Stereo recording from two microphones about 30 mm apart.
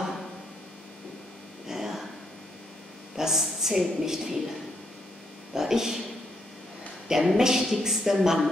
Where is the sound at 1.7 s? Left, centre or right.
Centre.